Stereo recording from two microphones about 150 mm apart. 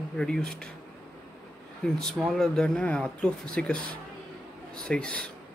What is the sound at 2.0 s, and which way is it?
A man's voice, centre (ahead or behind).